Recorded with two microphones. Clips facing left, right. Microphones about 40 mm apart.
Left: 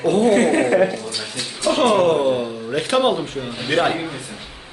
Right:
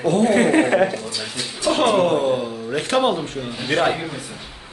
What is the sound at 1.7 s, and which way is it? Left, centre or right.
Speech, centre.